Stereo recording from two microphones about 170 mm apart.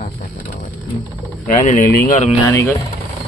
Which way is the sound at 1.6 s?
45° left (ahead or behind).